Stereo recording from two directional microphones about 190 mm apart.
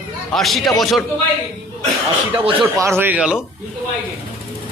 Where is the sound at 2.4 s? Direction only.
25° right (ahead or behind).